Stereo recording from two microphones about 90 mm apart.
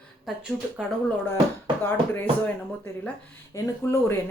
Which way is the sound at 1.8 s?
25° left (ahead or behind).